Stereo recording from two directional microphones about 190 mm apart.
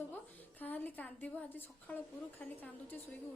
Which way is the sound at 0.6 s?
10° left (ahead or behind).